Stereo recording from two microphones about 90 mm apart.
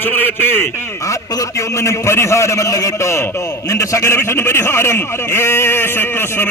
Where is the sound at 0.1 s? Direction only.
25° left (ahead or behind).